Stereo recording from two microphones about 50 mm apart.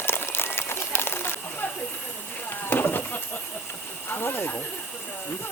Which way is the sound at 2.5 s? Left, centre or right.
Left.